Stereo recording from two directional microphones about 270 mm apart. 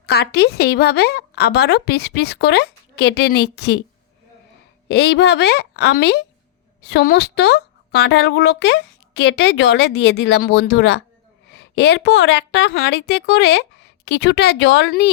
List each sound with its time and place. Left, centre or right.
0.0 s a woman's voice: left
4.9 s a woman's voice: left